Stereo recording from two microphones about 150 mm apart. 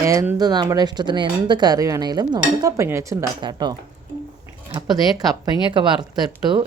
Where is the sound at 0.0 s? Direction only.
20° right (ahead or behind).